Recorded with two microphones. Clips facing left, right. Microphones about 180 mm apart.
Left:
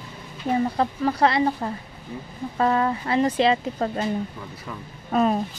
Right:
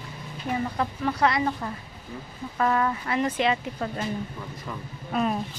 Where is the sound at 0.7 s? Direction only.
35° left (ahead or behind).